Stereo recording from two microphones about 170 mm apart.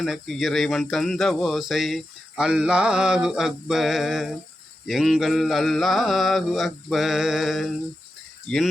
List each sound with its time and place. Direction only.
0.0 s speech: centre (ahead or behind)